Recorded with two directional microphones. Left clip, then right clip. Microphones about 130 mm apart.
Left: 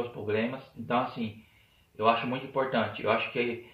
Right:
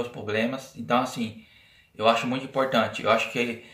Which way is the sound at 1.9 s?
35° right (ahead or behind).